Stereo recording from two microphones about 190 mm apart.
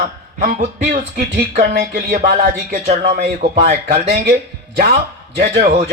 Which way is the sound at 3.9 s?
55° right (ahead or behind).